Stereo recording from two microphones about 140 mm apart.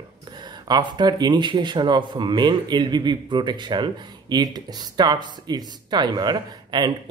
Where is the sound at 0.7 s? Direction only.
30° right (ahead or behind).